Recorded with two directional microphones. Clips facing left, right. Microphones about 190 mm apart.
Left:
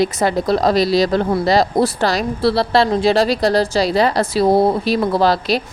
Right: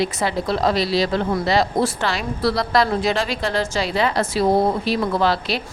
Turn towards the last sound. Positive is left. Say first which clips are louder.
# left 4 dB
turn(degrees=40)  # may be behind; listen again after turning